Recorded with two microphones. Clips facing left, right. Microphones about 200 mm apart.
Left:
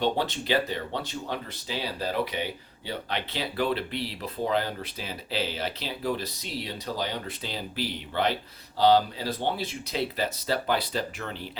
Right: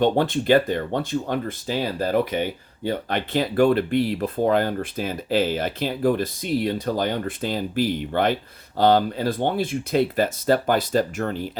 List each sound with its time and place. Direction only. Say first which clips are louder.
0.0 s speech: right 7 dB; 50° right (ahead or behind)